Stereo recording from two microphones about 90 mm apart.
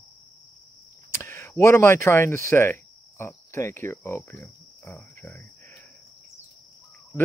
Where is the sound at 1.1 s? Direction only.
30° left (ahead or behind).